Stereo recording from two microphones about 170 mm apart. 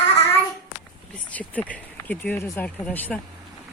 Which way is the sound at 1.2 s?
10° left (ahead or behind).